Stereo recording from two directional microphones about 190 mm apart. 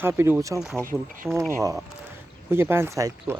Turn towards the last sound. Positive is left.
turn(degrees=-15)  # may be behind; listen again after turning